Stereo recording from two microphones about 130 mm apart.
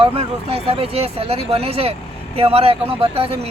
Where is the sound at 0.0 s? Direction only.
50° right (ahead or behind).